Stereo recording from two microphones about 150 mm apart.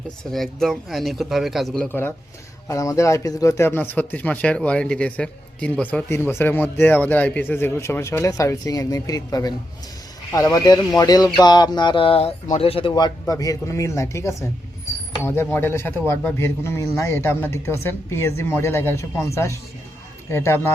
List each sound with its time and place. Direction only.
0.3 s speech: centre (ahead or behind)